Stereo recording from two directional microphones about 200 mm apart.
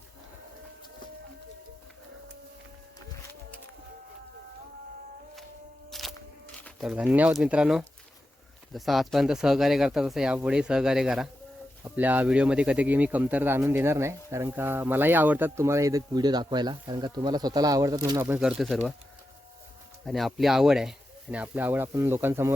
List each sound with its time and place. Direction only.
5.9 s music: centre (ahead or behind)
6.6 s speech: centre (ahead or behind); by 18.3 s 20° right (ahead or behind)
18.3 s speech: 5° right (ahead or behind)
20.1 s speech: centre (ahead or behind)